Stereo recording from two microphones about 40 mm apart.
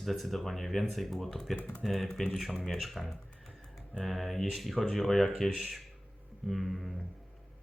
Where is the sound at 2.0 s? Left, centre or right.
Centre.